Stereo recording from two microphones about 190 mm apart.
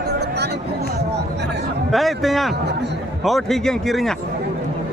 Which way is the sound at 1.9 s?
Centre (ahead or behind).